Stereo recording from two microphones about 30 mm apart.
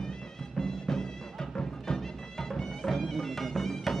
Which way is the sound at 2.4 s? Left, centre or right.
Centre.